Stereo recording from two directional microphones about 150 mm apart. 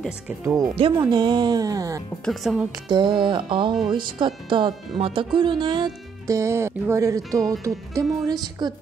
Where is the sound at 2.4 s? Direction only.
Centre (ahead or behind).